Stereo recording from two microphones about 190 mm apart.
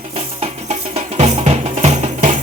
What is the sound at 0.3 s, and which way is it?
Music, 35° right (ahead or behind).